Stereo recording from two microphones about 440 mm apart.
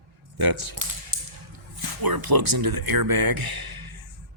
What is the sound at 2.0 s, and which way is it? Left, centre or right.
Speech, right.